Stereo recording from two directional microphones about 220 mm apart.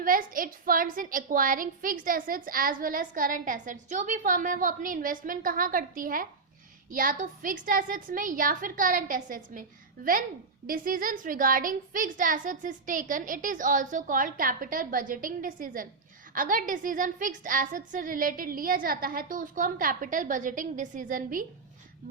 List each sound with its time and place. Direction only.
0.0 s a woman's voice: 40° right (ahead or behind)